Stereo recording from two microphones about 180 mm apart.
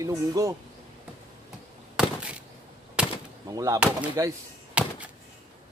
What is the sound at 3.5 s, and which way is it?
Speech, 20° right (ahead or behind).